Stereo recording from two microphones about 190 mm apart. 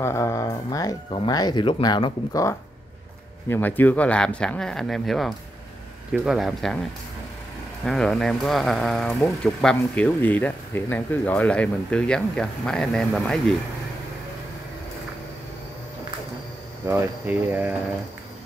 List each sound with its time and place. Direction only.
0.0 s speech: 15° left (ahead or behind)
7.8 s speech: centre (ahead or behind)
16.8 s speech: 10° right (ahead or behind)